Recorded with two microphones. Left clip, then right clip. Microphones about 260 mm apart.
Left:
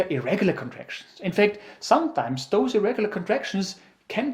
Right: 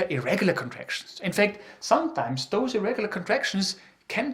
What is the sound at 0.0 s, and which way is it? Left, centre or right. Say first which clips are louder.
Speech: left 1 dB; right.